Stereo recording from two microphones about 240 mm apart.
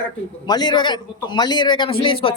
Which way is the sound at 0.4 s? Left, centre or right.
Centre.